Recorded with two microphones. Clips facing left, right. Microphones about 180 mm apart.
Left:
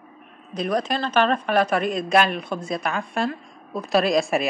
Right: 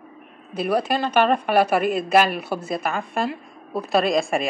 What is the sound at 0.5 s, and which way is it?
A man's voice, 5° right (ahead or behind).